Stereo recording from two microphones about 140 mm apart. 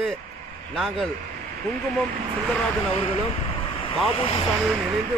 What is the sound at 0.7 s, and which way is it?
Speech, centre (ahead or behind).